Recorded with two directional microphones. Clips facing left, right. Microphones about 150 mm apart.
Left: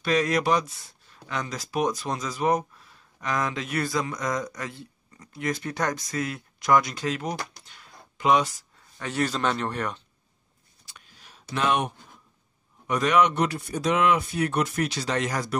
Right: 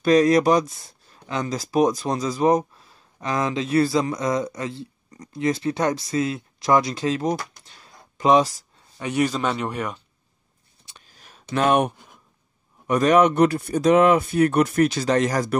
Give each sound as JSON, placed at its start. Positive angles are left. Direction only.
{"t": 0.0, "sound": "speech", "side_deg": -35}
{"t": 8.9, "sound": "a man's voice", "side_deg": -15}
{"t": 11.1, "sound": "a sound", "side_deg": -45}
{"t": 12.8, "sound": "speech", "side_deg": -45}